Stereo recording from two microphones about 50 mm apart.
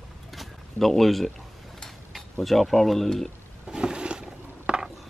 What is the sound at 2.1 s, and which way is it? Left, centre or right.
Speech, centre.